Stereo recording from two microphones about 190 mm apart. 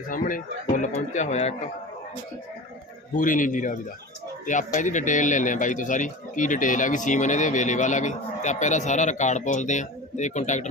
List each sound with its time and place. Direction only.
0.1 s speech: 45° left (ahead or behind)
3.2 s a man's voice: 45° left (ahead or behind)